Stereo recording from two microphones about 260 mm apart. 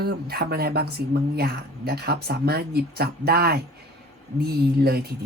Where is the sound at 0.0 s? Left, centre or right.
Right.